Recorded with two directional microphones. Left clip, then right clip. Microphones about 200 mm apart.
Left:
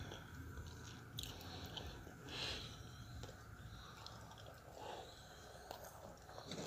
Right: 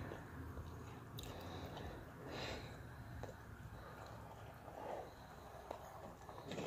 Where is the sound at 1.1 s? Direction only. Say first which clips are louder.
Left 1 dB; 20° right (ahead or behind).